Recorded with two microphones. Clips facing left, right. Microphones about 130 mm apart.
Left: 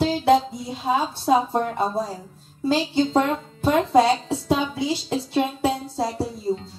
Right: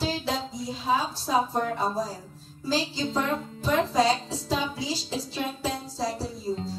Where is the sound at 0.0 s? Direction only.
60° left (ahead or behind).